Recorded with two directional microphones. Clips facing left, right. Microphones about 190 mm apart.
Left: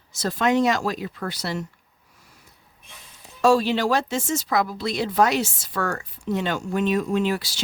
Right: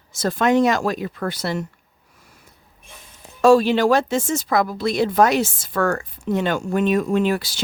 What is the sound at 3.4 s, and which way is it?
Speech, 55° right (ahead or behind).